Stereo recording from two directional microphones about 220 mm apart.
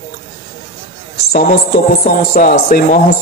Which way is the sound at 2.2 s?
40° left (ahead or behind).